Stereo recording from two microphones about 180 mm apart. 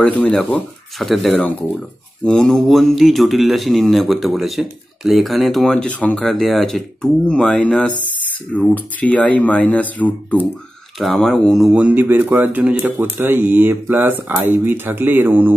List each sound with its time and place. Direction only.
0.0 s speech: 5° left (ahead or behind); by 15.5 s 10° right (ahead or behind)